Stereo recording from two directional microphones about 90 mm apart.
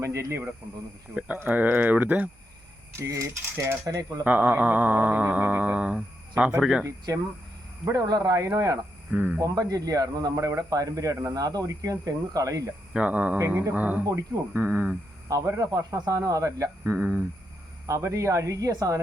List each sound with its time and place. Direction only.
0.0 s speech: 30° right (ahead or behind)
1.1 s a sound: 15° right (ahead or behind)
3.1 s speech: 35° right (ahead or behind)
4.2 s a sound: 20° right (ahead or behind)
6.6 s speech: 5° right (ahead or behind)
6.8 s speech: 40° right (ahead or behind)
9.1 s speech: 20° right (ahead or behind)
9.4 s speech: 40° right (ahead or behind)
12.9 s a sound: 15° right (ahead or behind)
14.0 s speech: 40° right (ahead or behind)
14.5 s speech: 25° right (ahead or behind)